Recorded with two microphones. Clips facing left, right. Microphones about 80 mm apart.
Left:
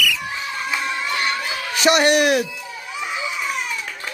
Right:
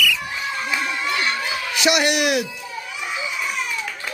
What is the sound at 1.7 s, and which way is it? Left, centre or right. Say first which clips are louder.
Speech: left 4 dB; left.